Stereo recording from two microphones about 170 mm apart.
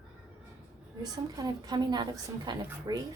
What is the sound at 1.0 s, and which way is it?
A woman's voice, 20° right (ahead or behind).